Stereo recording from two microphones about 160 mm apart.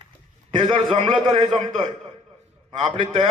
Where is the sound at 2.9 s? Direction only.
30° right (ahead or behind).